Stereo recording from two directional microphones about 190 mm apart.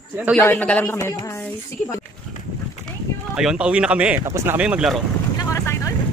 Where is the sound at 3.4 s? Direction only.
5° right (ahead or behind).